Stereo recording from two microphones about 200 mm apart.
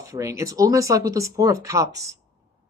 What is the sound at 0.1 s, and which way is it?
Speech, 15° right (ahead or behind).